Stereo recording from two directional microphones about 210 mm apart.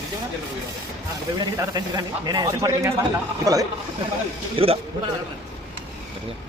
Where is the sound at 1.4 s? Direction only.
20° right (ahead or behind).